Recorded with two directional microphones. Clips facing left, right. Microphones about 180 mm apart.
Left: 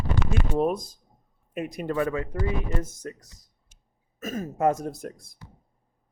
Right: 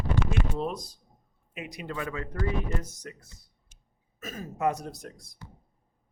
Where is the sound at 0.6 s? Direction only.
50° left (ahead or behind).